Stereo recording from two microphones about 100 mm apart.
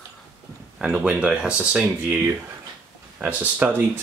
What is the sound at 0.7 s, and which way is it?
Speech, 10° right (ahead or behind).